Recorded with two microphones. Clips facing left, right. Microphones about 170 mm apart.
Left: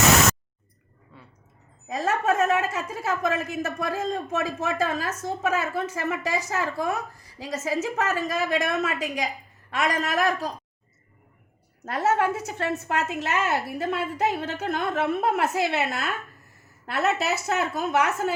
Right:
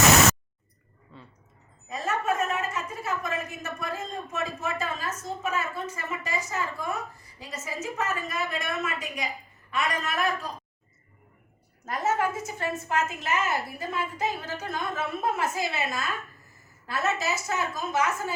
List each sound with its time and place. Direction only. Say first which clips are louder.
1.9 s a woman's voice: left 4 dB; 90° left
11.9 s a woman's voice: left 4 dB; 70° left (ahead or behind)